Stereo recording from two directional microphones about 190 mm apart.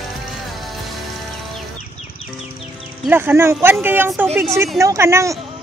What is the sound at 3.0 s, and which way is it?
A woman's voice, 10° right (ahead or behind).